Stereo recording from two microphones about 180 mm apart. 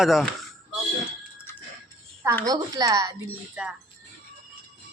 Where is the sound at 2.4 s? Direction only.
20° right (ahead or behind).